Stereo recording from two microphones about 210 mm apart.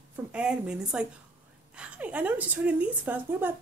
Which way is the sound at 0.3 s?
5° right (ahead or behind).